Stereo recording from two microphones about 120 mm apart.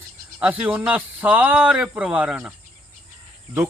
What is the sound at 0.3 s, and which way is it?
Speech, 15° right (ahead or behind).